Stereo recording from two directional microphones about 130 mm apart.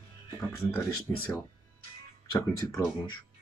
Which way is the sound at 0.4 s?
15° left (ahead or behind).